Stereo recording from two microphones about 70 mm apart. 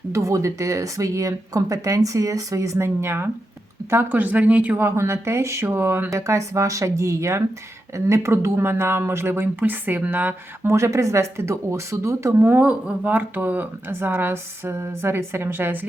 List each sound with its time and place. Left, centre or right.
0.1 s speech: right
4.1 s speech: right
4.8 s speech: right
6.1 s speech: right
10.7 s speech: right
12.3 s speech: right